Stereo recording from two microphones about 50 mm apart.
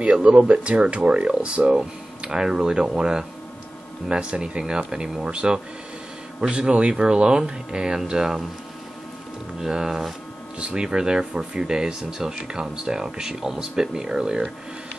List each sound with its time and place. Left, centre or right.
0.0 s speech: right
9.6 s speech: centre